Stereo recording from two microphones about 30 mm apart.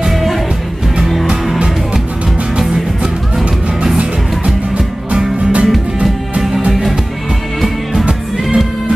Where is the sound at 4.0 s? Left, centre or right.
Right.